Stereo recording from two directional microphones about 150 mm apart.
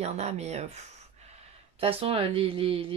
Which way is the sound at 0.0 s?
45° right (ahead or behind).